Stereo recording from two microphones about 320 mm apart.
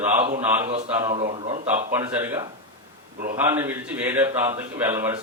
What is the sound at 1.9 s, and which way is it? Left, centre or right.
Speech, centre.